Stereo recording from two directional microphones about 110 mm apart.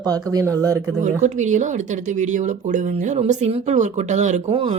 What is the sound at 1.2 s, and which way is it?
Speech, 90° right.